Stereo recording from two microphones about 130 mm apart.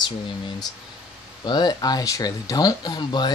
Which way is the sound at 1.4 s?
35° left (ahead or behind).